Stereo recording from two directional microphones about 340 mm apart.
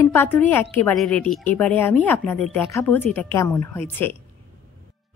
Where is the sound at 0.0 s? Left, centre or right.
Centre.